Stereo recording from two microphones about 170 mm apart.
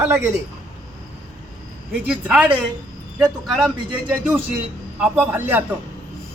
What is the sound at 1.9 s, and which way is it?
Speech, 5° right (ahead or behind).